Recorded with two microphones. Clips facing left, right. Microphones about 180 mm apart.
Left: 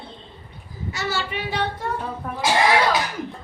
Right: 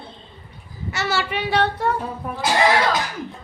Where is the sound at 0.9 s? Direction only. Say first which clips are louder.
Right 3 dB; 75° right (ahead or behind).